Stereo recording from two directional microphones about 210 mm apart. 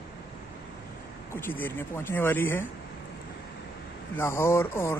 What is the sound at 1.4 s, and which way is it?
Speech, 10° left (ahead or behind).